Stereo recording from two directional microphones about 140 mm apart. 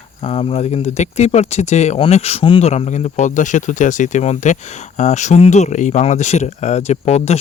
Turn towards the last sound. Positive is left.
turn(degrees=50)  # may be behind; listen again after turning